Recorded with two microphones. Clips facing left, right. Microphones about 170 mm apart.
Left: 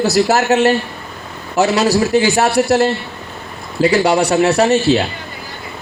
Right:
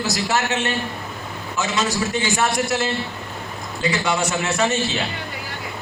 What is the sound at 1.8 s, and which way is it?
Speech, 35° left (ahead or behind).